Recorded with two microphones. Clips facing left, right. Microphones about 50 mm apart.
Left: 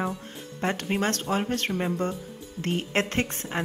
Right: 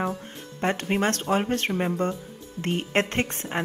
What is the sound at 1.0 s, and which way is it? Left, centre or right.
Speech, right.